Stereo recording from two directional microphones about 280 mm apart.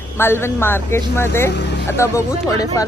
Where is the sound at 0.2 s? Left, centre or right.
Centre.